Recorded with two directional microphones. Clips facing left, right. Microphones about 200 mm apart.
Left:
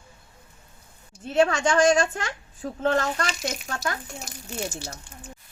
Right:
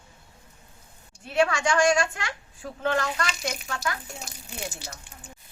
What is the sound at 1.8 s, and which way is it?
Speech, 40° left (ahead or behind).